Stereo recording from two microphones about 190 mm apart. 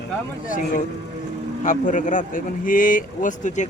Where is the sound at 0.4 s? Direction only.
45° left (ahead or behind).